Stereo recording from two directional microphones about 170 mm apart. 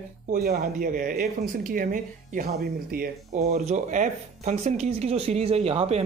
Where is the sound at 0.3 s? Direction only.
55° right (ahead or behind).